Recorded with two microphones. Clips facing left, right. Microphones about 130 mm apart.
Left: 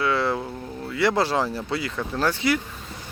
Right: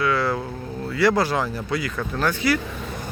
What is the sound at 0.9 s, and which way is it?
Speech, 25° left (ahead or behind).